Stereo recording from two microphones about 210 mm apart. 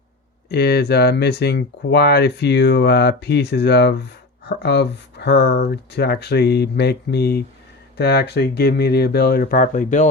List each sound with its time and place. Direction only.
0.4 s speech: 50° left (ahead or behind)